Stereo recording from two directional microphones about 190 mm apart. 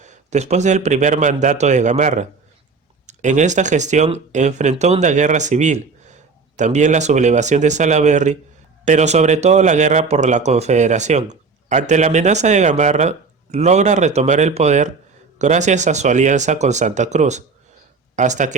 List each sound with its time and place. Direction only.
0.0 s speech: 40° right (ahead or behind)